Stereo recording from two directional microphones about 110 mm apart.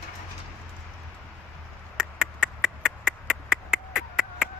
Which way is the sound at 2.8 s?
5° right (ahead or behind).